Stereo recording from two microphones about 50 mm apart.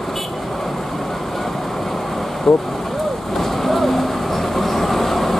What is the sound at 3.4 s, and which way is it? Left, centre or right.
Vehicle, centre.